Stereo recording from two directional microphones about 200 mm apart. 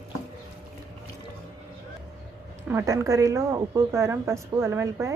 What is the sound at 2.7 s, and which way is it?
A woman's voice, 15° right (ahead or behind).